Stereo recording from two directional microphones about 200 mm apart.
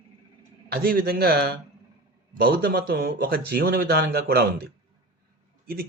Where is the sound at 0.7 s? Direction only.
50° right (ahead or behind).